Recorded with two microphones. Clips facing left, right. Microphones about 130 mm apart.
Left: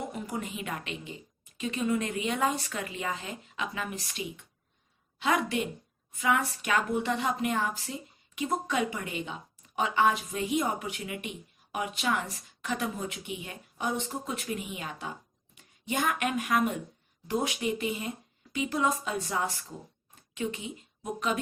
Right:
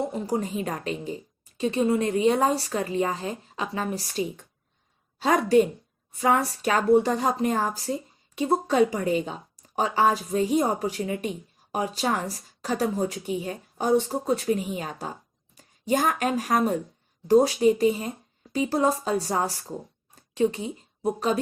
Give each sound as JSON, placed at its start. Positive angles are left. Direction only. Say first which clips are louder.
{"t": 0.0, "sound": "a woman's voice", "louder": "right 8 dB", "side_deg": -35}